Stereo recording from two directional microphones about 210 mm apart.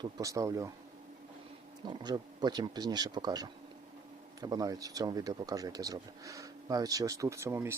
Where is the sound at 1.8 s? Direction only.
20° right (ahead or behind).